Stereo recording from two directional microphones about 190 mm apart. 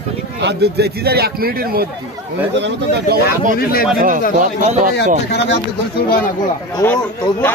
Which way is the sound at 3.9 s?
45° right (ahead or behind).